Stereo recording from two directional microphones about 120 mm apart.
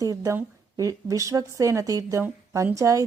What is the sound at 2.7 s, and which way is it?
Speech, 25° right (ahead or behind).